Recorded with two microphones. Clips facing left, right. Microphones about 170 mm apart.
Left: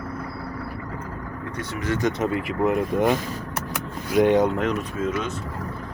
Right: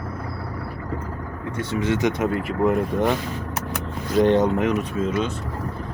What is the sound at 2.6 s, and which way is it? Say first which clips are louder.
Speech: even; 5° left (ahead or behind).